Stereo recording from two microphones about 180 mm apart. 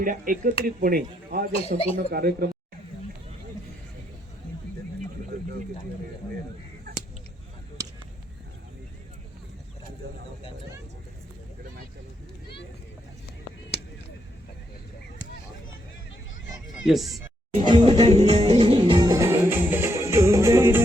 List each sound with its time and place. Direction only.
0.0 s speech: 50° right (ahead or behind)
1.5 s speech: 35° left (ahead or behind)
2.0 s speech: 60° right (ahead or behind)
5.3 s a sound: 55° right (ahead or behind)
16.8 s speech: centre (ahead or behind)
17.7 s music: 25° right (ahead or behind)